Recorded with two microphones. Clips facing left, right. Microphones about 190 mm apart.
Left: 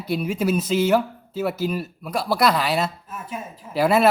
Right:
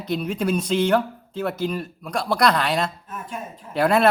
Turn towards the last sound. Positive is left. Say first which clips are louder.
# left 1 dB
turn(degrees=5)  # may be behind; listen again after turning